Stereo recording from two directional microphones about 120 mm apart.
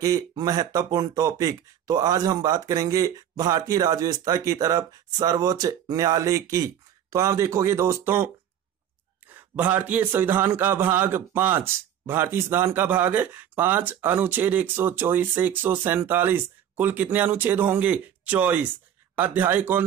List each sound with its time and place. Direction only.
0.0 s speech: 30° right (ahead or behind)
9.3 s a man's voice: 15° right (ahead or behind)